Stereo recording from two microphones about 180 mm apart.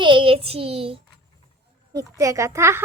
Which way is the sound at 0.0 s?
30° right (ahead or behind).